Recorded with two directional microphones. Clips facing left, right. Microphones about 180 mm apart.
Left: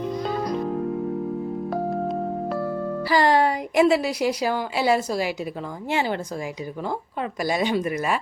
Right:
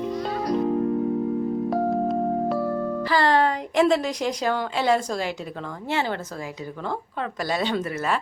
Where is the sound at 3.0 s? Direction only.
15° left (ahead or behind).